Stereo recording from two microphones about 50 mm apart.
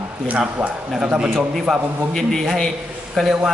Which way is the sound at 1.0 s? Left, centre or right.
Centre.